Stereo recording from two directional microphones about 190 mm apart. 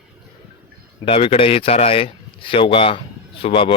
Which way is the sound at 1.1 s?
30° left (ahead or behind).